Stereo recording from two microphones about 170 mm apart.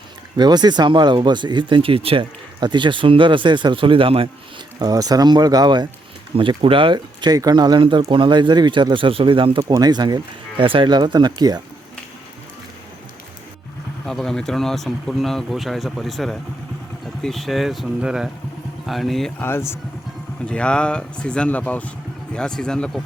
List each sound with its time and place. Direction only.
0.3 s speech: 25° right (ahead or behind)
14.1 s speech: 5° left (ahead or behind)
19.4 s speech: 15° left (ahead or behind)